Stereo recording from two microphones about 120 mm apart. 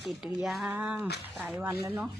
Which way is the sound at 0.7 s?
15° right (ahead or behind).